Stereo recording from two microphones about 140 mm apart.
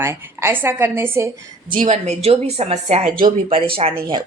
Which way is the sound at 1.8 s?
55° right (ahead or behind).